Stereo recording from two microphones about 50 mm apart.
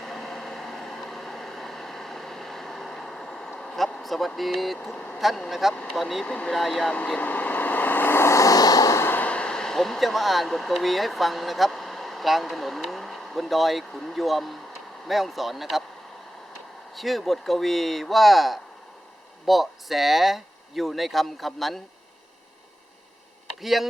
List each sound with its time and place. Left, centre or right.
0.0 s a sound: centre
4.0 s speech: centre
6.2 s speech: centre
6.5 s speech: centre
7.2 s vehicle: left
8.2 s a sound: left
9.2 s speech: left; by 15.8 s centre
16.9 s speech: centre
23.6 s speech: centre